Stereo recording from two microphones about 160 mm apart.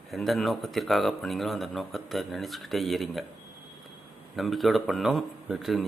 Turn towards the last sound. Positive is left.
turn(degrees=0)  # may be behind; listen again after turning